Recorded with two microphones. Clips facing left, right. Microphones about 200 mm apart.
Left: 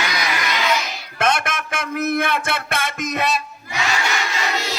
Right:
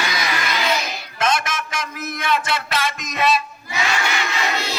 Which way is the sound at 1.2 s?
60° left (ahead or behind).